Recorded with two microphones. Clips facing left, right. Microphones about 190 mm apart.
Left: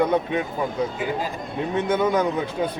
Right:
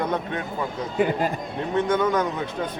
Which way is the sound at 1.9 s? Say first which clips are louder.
Left 2 dB; 10° left (ahead or behind).